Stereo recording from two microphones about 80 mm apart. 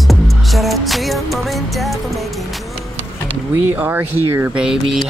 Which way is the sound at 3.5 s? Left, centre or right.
Right.